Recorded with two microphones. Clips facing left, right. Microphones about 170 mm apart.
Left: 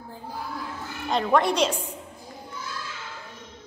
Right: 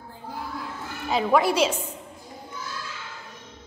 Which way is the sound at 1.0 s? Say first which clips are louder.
Right 1 dB; 5° right (ahead or behind).